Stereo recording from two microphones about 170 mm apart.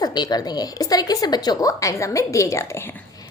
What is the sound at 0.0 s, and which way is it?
A woman's voice, 25° left (ahead or behind).